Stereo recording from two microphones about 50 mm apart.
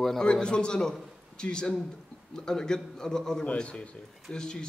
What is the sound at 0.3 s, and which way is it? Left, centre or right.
Speech, centre.